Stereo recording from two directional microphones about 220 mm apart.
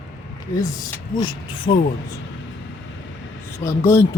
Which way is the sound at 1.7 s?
45° left (ahead or behind).